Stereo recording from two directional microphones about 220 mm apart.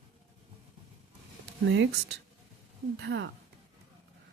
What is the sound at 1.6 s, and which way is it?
Speech, 55° right (ahead or behind).